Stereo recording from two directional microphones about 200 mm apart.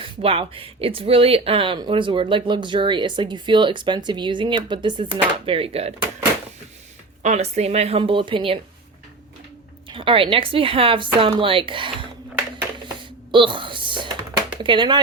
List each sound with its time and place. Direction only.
0.0 s speech: 30° right (ahead or behind)
7.2 s speech: 35° right (ahead or behind)
9.9 s speech: 25° right (ahead or behind)
13.3 s speech: 25° right (ahead or behind)